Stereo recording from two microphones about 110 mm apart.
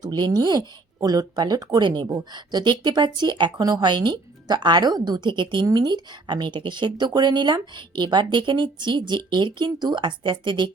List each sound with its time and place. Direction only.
0.0 s speech: 35° right (ahead or behind)